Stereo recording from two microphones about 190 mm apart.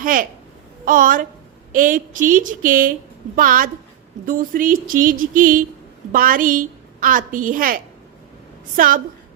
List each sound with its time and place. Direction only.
0.0 s a woman's voice: 45° right (ahead or behind)